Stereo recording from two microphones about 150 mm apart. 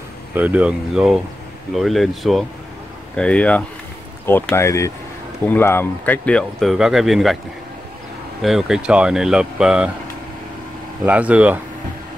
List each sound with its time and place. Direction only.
0.3 s speech: 10° right (ahead or behind)
8.4 s speech: centre (ahead or behind)
11.1 s speech: 10° right (ahead or behind)